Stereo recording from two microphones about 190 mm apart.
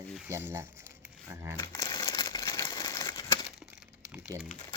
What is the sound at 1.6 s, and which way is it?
Crumpling, 15° left (ahead or behind).